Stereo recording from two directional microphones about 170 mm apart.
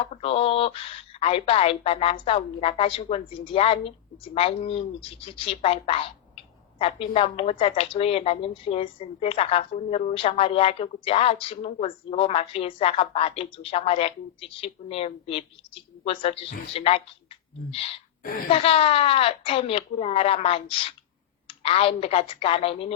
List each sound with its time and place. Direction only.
0.1 s a woman's voice: 35° left (ahead or behind)